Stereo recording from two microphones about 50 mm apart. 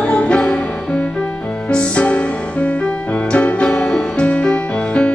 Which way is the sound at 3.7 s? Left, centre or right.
Centre.